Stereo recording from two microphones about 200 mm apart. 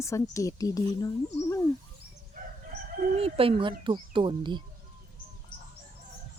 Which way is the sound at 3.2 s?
30° right (ahead or behind).